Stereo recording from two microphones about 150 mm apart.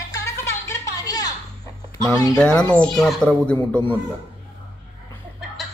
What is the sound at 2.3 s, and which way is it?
Speech, 5° left (ahead or behind).